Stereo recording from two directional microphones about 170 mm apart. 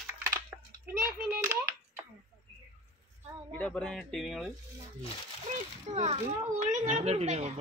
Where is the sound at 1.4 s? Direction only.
15° right (ahead or behind).